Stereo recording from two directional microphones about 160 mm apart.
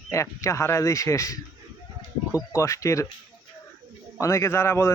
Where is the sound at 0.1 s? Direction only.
20° left (ahead or behind).